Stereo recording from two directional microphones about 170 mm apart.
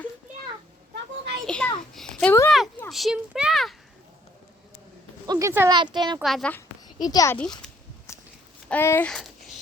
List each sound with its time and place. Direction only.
1.5 s a sound: 5° left (ahead or behind)
2.1 s a sound: 15° left (ahead or behind)
2.9 s a child's voice: centre (ahead or behind)
5.2 s speech: 20° right (ahead or behind)
6.2 s a child's voice: 5° left (ahead or behind)
7.0 s a child's voice: 20° left (ahead or behind)
8.7 s a child's voice: 15° left (ahead or behind)